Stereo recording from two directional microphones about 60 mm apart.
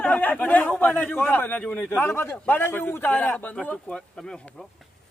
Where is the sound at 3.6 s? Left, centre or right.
Centre.